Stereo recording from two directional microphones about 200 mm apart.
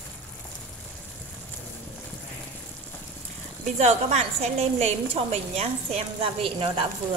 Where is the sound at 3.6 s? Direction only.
35° right (ahead or behind).